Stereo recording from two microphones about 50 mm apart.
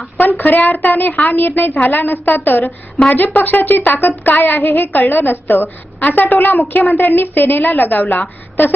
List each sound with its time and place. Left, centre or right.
0.2 s a woman's voice: left